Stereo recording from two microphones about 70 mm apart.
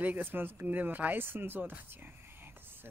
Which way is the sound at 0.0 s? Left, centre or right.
Right.